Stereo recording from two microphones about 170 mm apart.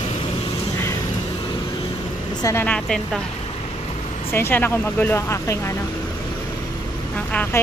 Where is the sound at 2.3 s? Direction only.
20° left (ahead or behind).